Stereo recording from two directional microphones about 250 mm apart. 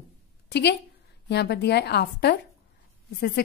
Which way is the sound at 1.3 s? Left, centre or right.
Left.